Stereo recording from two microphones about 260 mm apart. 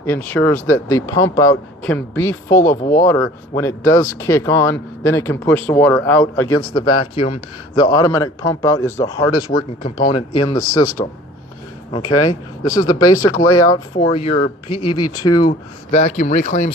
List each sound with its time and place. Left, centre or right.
0.0 s speech: centre
6.4 s speech: left
6.7 s speech: centre
13.3 s speech: left
13.7 s speech: centre
15.0 s speech: left
15.4 s speech: left